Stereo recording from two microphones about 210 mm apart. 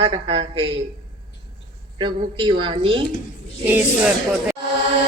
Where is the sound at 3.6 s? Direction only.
10° right (ahead or behind).